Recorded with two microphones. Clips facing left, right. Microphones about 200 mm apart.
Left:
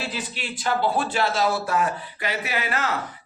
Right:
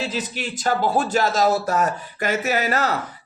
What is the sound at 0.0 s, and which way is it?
Speech, 45° right (ahead or behind).